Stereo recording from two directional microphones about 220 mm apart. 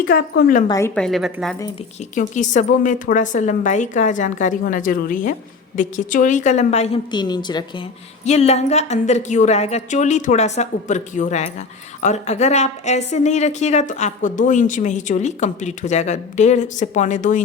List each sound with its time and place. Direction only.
0.1 s a woman's voice: 40° left (ahead or behind)
0.7 s a woman's voice: 10° left (ahead or behind)
2.1 s speech: 35° left (ahead or behind)
8.2 s speech: 30° left (ahead or behind)